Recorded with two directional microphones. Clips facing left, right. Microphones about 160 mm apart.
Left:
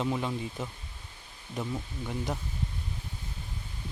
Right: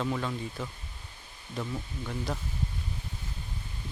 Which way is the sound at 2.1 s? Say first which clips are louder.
Left 1 dB; 15° left (ahead or behind).